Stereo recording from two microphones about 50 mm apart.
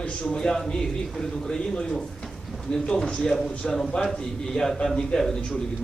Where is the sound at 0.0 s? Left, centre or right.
Left.